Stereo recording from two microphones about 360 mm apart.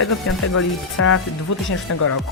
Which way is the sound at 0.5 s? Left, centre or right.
Left.